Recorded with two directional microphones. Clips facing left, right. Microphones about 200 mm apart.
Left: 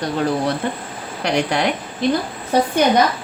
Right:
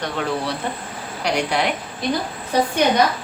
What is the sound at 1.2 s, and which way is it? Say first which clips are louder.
Speech: left 2 dB; 50° left (ahead or behind).